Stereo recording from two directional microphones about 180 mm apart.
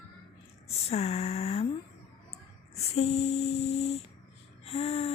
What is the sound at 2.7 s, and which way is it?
Speech, 35° left (ahead or behind).